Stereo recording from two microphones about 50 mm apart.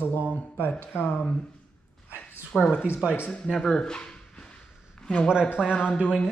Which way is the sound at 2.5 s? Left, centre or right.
Centre.